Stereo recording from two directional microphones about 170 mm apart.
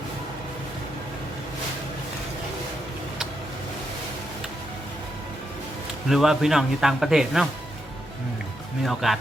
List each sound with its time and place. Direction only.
6.1 s a man's voice: centre (ahead or behind)
8.8 s a man's voice: centre (ahead or behind)